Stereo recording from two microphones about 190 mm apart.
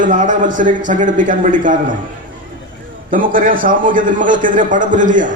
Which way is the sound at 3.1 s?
45° right (ahead or behind).